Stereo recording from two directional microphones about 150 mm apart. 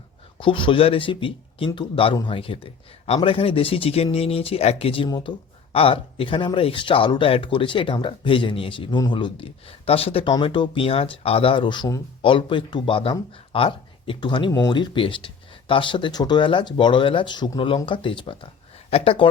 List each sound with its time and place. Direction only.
0.3 s speech: 35° left (ahead or behind)
5.0 s speech: 30° left (ahead or behind)